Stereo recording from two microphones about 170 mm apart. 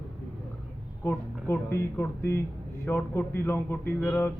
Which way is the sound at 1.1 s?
15° left (ahead or behind).